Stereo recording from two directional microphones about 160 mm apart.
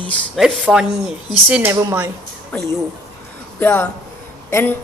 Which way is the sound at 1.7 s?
20° right (ahead or behind).